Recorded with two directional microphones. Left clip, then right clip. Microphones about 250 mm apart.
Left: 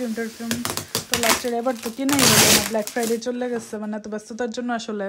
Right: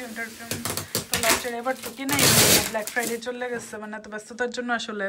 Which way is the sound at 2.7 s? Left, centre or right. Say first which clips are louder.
Left 4 dB; left.